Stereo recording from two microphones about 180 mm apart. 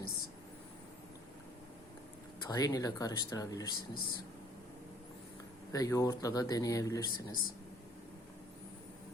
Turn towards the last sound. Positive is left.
turn(degrees=20)  # may be behind; listen again after turning